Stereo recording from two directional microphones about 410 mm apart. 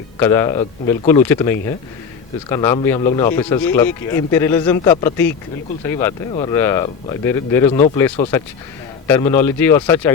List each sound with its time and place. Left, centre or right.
0.2 s speech: centre